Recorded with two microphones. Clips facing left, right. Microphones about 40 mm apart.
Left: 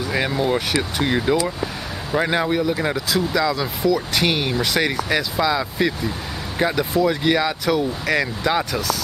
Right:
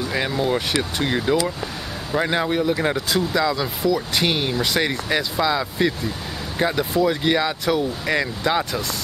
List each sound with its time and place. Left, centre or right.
0.1 s speech: centre